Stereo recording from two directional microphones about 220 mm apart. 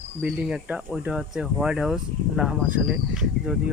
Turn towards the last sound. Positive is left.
turn(degrees=0)  # may be behind; listen again after turning